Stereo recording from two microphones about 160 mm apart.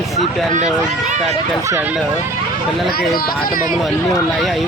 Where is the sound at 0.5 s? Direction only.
50° right (ahead or behind).